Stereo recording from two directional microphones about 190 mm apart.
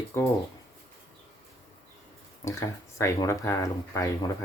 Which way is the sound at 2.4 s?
15° left (ahead or behind).